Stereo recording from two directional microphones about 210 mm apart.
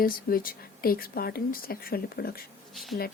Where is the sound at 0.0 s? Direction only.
45° left (ahead or behind).